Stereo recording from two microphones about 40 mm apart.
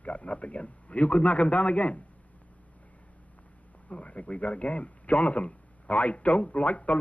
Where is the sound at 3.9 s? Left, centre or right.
Left.